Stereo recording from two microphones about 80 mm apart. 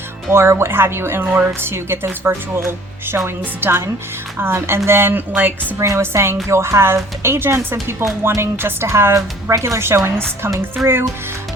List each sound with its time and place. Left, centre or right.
0.3 s a woman's voice: right
5.8 s a woman's voice: right
10.8 s a child's voice: centre